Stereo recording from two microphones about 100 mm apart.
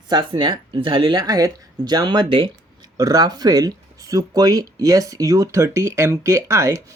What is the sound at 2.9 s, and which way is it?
Speech, 40° right (ahead or behind).